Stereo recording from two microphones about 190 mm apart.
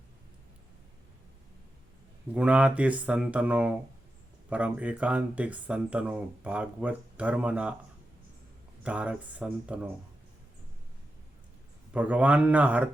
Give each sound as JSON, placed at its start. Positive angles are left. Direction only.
{"t": 2.3, "sound": "speech", "side_deg": -5}
{"t": 8.8, "sound": "speech", "side_deg": -5}
{"t": 11.9, "sound": "speech", "side_deg": -5}